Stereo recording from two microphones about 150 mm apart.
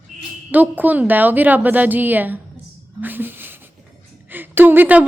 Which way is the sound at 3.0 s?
15° right (ahead or behind).